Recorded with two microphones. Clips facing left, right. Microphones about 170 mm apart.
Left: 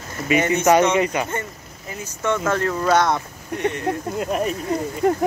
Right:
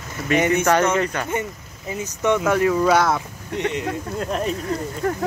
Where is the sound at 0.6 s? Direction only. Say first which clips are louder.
Left 2 dB; 10° left (ahead or behind).